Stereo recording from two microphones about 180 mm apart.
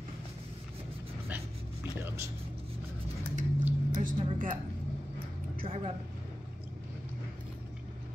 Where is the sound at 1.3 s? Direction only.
10° right (ahead or behind).